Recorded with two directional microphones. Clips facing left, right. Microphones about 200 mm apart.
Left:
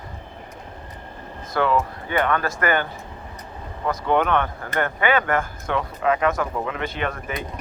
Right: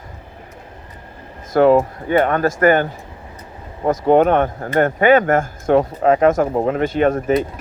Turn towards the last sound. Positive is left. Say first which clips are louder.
# right 12 dB
turn(degrees=-45)  # may be behind; listen again after turning